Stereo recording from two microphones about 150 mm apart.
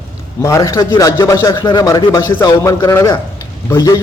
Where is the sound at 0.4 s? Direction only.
20° left (ahead or behind).